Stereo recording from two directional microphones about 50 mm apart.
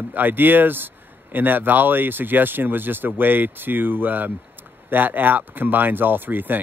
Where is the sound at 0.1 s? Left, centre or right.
Right.